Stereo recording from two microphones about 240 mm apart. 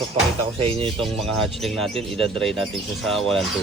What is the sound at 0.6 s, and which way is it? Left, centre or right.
Speech, right.